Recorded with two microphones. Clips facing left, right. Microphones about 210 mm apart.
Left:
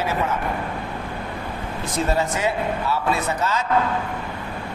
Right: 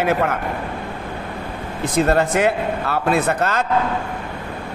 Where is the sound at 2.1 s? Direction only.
65° right (ahead or behind).